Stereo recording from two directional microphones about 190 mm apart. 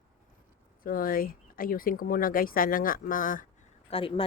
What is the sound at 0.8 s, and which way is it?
Speech, 50° left (ahead or behind).